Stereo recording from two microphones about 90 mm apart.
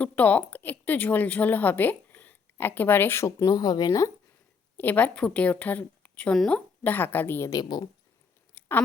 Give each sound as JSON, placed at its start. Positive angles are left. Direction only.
{"t": 0.0, "sound": "speech", "side_deg": 15}
{"t": 4.8, "sound": "a woman's voice", "side_deg": 20}
{"t": 7.5, "sound": "speech", "side_deg": 50}
{"t": 8.5, "sound": "scissors", "side_deg": 25}